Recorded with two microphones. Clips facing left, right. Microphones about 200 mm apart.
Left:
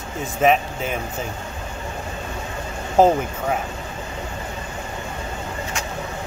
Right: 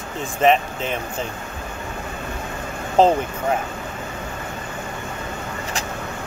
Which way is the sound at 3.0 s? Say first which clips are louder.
Even; 10° left (ahead or behind).